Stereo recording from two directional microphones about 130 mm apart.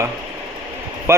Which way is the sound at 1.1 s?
20° right (ahead or behind).